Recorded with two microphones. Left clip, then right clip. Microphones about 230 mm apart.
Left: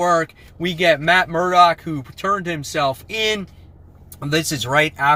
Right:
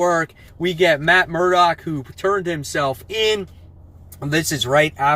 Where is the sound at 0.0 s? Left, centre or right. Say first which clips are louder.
Left 1 dB; centre.